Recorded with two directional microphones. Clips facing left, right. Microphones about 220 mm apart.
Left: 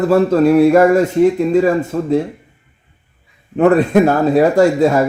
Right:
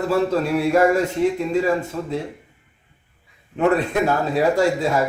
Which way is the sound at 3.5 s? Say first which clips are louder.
Left 8 dB; 50° left (ahead or behind).